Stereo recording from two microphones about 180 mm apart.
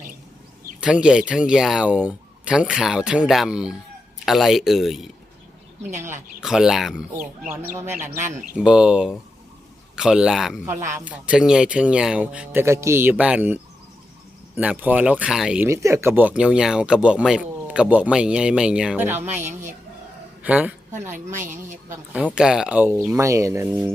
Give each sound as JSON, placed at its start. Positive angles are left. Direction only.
{"t": 0.8, "sound": "speech", "side_deg": -5}
{"t": 6.4, "sound": "speech", "side_deg": -5}
{"t": 7.5, "sound": "speech", "side_deg": -15}
{"t": 21.3, "sound": "a woman's voice", "side_deg": -45}
{"t": 21.8, "sound": "speech", "side_deg": -10}